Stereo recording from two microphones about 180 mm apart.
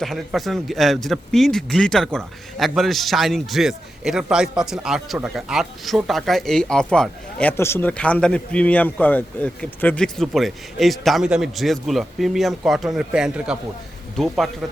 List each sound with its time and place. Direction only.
0.0 s a man's voice: centre (ahead or behind)